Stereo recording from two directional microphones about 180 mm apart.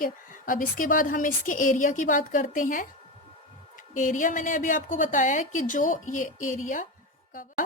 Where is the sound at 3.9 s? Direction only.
45° left (ahead or behind).